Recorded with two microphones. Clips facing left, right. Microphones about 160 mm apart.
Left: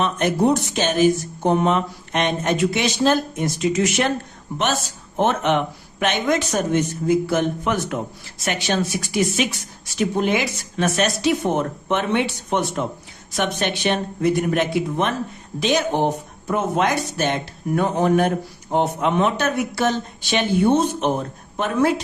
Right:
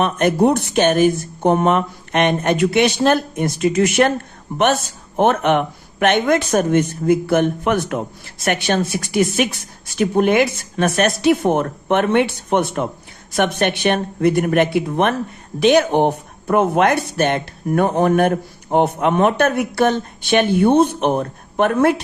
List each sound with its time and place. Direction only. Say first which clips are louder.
0.0 s speech: right 4 dB; 55° right (ahead or behind)